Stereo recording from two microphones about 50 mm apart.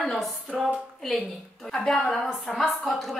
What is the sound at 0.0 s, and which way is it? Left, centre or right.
Speech, centre.